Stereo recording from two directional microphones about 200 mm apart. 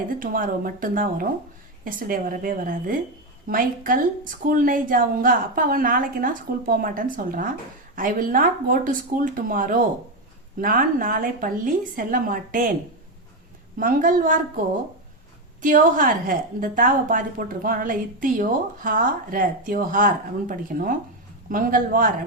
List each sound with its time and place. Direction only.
0.1 s a woman's voice: 45° right (ahead or behind)
13.7 s a woman's voice: 40° right (ahead or behind)
15.6 s a woman's voice: 45° right (ahead or behind)